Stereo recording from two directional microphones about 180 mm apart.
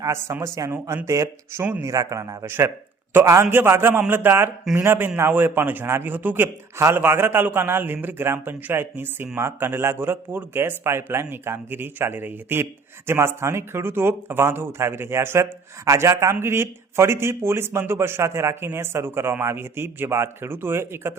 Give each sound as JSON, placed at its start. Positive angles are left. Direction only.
{"t": 0.0, "sound": "a man's voice", "side_deg": -15}